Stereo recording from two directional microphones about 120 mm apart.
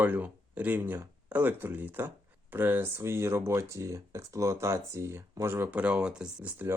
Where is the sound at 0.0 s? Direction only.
15° right (ahead or behind).